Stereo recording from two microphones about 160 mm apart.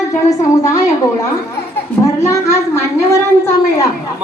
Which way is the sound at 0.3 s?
20° left (ahead or behind).